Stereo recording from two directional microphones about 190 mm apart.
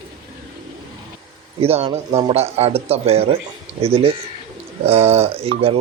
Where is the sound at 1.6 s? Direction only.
30° right (ahead or behind).